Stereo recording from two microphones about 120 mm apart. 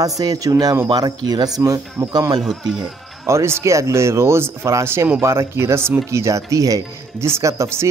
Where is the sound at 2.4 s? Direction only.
5° right (ahead or behind).